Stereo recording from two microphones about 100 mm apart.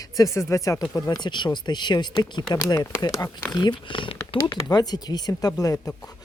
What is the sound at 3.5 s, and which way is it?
Speech, 50° left (ahead or behind).